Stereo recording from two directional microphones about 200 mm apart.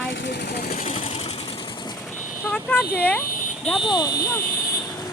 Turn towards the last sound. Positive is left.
turn(degrees=15)  # may be behind; listen again after turning